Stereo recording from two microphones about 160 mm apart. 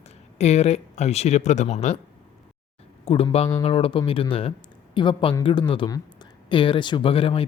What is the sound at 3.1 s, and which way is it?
Speech, 35° left (ahead or behind).